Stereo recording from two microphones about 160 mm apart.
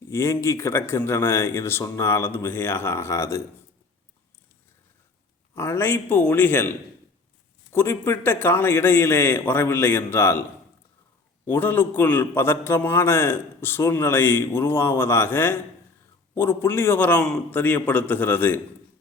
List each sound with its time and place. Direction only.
0.1 s a man's voice: 20° left (ahead or behind)
5.5 s a man's voice: 15° left (ahead or behind)
11.4 s a man's voice: 10° left (ahead or behind)